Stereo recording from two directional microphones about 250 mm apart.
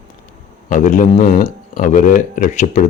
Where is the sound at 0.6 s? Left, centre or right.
Left.